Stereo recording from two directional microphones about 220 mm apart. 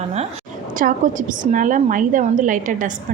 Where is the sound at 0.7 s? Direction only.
35° right (ahead or behind).